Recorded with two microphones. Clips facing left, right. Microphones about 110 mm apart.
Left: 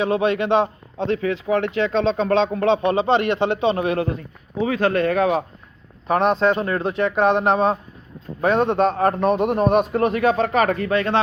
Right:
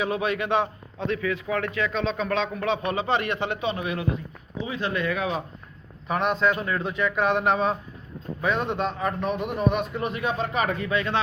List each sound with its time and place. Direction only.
0.0 s a man's voice: 25° left (ahead or behind)
3.8 s a man's voice: 50° left (ahead or behind)
4.5 s speech: 65° left (ahead or behind)
4.9 s a man's voice: 45° left (ahead or behind)
6.1 s a man's voice: 35° left (ahead or behind)
6.7 s a man's voice: 45° left (ahead or behind)
7.0 s a man's voice: 25° left (ahead or behind)
8.4 s speech: 50° left (ahead or behind)
8.6 s a man's voice: 40° left (ahead or behind)